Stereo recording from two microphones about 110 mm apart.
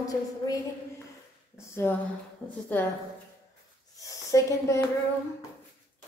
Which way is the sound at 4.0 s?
30° left (ahead or behind).